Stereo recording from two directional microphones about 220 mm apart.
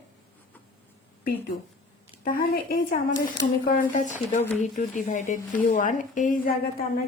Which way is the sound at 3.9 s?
35° left (ahead or behind).